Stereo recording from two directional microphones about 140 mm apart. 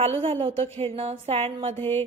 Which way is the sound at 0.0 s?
45° right (ahead or behind).